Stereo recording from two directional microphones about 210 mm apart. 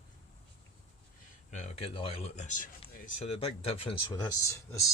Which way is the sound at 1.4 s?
35° left (ahead or behind).